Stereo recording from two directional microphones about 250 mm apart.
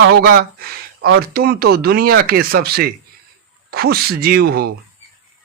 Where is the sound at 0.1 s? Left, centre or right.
Right.